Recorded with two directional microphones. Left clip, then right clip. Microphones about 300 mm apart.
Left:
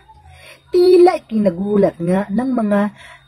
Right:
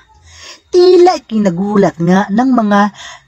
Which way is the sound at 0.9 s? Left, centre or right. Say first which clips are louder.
Right 3 dB; right.